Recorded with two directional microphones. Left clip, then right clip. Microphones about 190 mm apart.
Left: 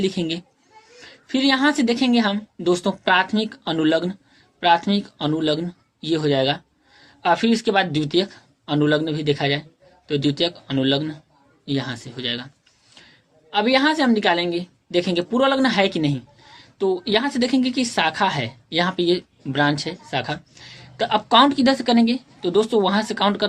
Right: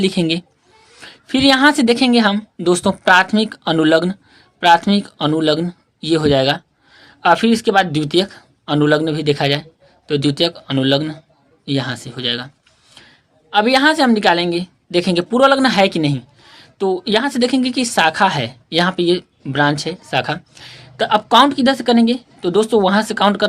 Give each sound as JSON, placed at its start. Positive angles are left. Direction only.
{"t": 0.0, "sound": "a woman's voice", "side_deg": -35}